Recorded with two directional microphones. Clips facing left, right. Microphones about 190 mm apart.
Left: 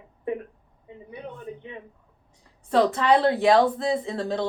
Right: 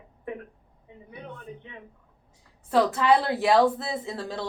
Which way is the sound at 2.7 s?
5° right (ahead or behind).